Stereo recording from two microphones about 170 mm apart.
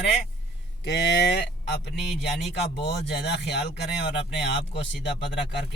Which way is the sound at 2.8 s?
75° left (ahead or behind).